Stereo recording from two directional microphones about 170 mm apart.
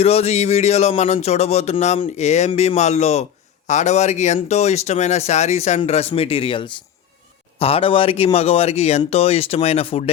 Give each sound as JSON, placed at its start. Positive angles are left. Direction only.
{"t": 0.0, "sound": "speech", "side_deg": 40}